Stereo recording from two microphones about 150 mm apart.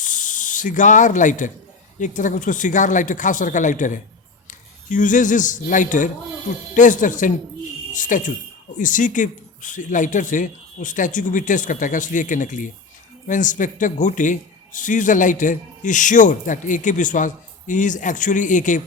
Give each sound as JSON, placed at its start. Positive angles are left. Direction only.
{"t": 0.0, "sound": "snake", "side_deg": 60}
{"t": 2.0, "sound": "a man's voice", "side_deg": 60}